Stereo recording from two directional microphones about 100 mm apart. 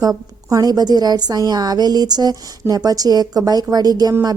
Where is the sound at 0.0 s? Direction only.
35° right (ahead or behind).